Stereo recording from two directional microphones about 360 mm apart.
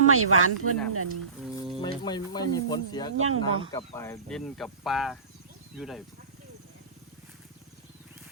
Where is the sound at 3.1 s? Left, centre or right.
Right.